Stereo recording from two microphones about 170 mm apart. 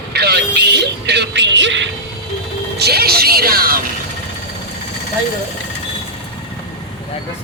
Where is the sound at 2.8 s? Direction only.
70° right (ahead or behind).